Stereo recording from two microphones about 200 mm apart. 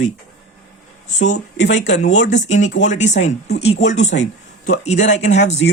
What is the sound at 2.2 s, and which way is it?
Speech, 35° left (ahead or behind).